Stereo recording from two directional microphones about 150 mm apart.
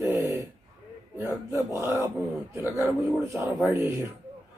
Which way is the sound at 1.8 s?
20° right (ahead or behind).